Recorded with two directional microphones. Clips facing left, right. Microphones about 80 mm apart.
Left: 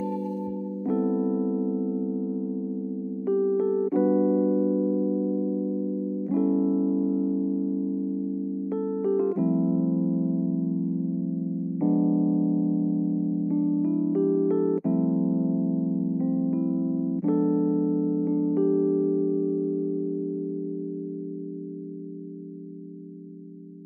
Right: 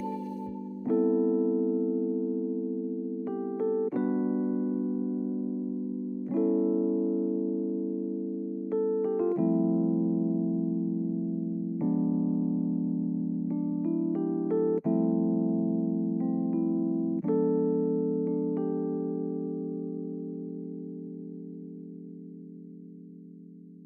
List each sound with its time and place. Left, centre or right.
0.8 s music: centre
3.3 s electric piano: centre
6.2 s music: centre
8.6 s electric piano: centre
11.8 s electric piano: centre
13.5 s electric piano: centre
18.2 s music: centre